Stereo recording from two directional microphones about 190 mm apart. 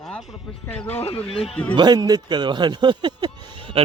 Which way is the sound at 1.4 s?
5° left (ahead or behind).